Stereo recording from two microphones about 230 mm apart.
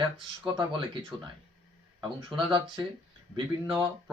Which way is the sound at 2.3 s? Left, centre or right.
Centre.